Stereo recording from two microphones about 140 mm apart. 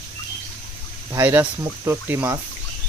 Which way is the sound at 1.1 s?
15° right (ahead or behind).